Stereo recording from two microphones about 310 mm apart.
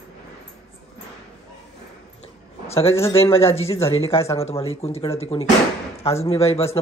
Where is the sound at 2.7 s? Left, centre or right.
Centre.